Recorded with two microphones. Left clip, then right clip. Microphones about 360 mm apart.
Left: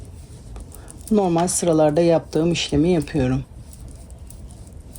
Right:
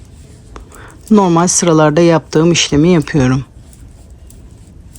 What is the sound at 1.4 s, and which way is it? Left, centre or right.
Speech, right.